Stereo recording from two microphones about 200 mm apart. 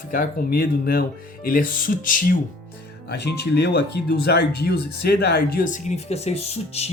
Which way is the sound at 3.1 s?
55° left (ahead or behind).